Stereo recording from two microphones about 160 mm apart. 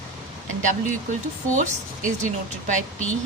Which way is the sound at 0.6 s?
50° right (ahead or behind).